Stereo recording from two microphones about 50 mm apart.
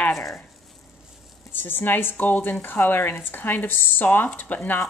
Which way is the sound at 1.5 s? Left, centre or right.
Left.